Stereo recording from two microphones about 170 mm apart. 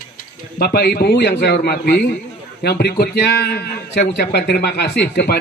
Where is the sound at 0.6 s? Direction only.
70° left (ahead or behind).